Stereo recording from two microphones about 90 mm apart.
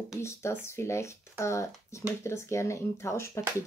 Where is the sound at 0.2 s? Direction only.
30° left (ahead or behind).